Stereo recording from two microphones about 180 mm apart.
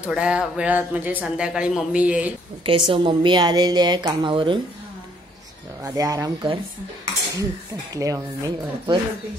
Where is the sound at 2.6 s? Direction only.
30° right (ahead or behind).